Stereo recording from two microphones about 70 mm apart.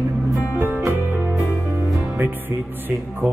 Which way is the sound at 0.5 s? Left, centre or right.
Right.